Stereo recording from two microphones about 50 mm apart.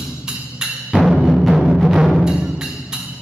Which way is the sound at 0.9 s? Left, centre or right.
Centre.